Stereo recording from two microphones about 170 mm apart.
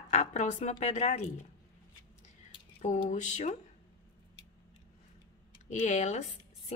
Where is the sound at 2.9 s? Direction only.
45° left (ahead or behind).